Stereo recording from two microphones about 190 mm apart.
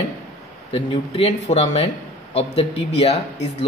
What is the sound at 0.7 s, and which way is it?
Speech, 30° left (ahead or behind).